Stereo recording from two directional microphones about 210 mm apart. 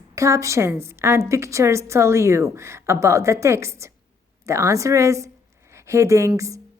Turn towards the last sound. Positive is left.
turn(degrees=-15)  # may be behind; listen again after turning